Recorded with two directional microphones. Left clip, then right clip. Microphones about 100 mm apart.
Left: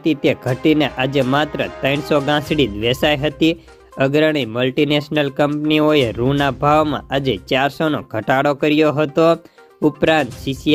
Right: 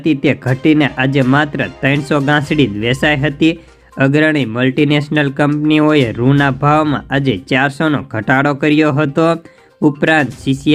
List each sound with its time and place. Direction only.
0.0 s speech: 45° left (ahead or behind)